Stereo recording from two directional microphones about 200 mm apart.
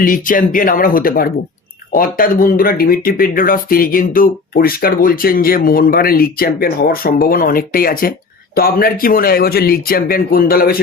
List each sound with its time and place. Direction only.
0.0 s speech: 45° left (ahead or behind)